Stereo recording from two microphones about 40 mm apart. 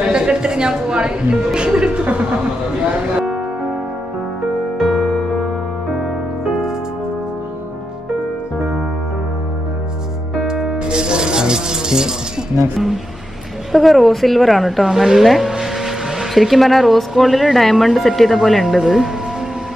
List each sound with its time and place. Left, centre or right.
0.0 s speech: right
4.7 s music: centre
10.4 s music: centre
13.7 s a woman's voice: centre